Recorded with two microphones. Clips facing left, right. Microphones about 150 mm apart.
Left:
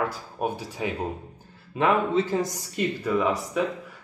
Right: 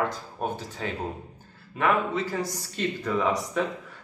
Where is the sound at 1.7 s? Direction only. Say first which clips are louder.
Left 2 dB; 25° left (ahead or behind).